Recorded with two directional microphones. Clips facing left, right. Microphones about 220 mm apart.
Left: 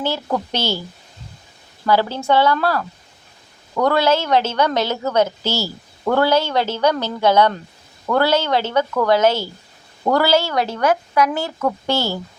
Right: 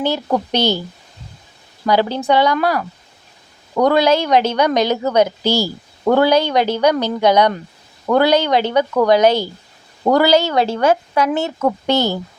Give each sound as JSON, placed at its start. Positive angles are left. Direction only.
{"t": 0.3, "sound": "a woman's voice", "side_deg": -20}
{"t": 1.8, "sound": "a woman's voice", "side_deg": -15}